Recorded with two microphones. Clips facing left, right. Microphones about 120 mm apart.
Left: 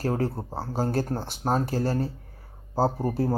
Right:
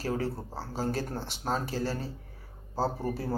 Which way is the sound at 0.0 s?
50° left (ahead or behind).